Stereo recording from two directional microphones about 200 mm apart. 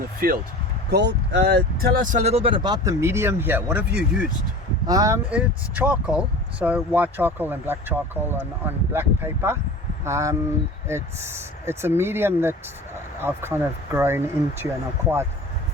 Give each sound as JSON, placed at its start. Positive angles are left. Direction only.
{"t": 0.2, "sound": "speech", "side_deg": -45}
{"t": 0.9, "sound": "speech", "side_deg": -60}
{"t": 2.2, "sound": "speech", "side_deg": -30}